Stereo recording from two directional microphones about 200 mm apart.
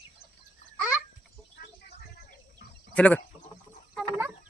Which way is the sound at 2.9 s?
5° left (ahead or behind).